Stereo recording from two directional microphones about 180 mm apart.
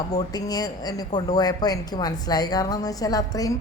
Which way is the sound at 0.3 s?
20° left (ahead or behind).